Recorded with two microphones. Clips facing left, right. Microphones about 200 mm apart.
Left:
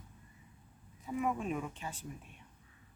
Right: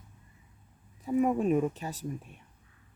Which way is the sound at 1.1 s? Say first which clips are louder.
Right 9 dB; 40° right (ahead or behind).